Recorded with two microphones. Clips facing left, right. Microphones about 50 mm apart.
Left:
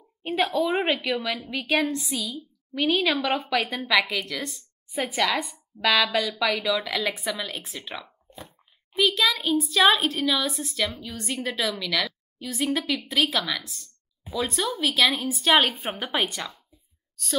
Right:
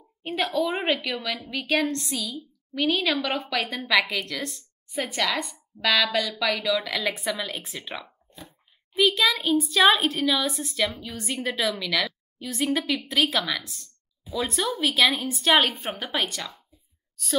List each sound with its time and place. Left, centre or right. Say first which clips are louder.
0.2 s a woman's voice: left 1 dB; centre